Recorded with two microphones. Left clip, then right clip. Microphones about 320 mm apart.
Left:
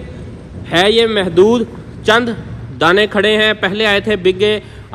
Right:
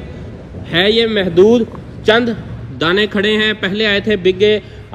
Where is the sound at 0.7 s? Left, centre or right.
Centre.